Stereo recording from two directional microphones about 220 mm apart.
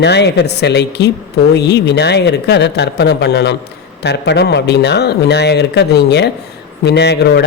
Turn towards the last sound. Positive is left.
turn(degrees=50)  # may be behind; listen again after turning